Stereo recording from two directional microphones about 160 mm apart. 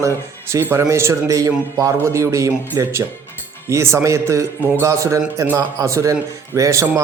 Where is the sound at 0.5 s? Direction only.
15° right (ahead or behind).